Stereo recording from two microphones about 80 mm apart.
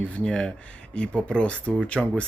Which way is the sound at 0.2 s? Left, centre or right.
Centre.